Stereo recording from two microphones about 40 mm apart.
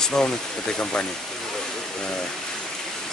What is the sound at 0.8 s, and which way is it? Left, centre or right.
Speech, left.